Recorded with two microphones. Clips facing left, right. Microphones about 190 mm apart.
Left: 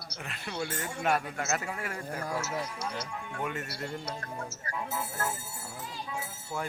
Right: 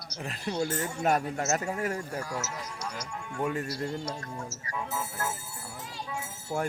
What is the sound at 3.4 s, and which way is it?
Speech, 30° right (ahead or behind).